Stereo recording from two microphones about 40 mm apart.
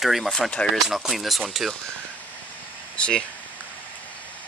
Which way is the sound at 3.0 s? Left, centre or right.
Centre.